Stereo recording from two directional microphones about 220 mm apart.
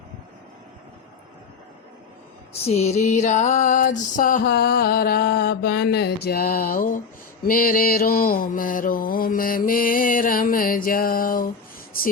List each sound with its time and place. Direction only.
2.5 s music: 30° left (ahead or behind)
7.4 s mantra: 40° left (ahead or behind)